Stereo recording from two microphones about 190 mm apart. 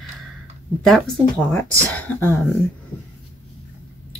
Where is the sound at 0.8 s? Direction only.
Centre (ahead or behind).